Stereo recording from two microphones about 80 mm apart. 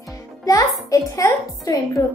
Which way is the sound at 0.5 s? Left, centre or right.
Left.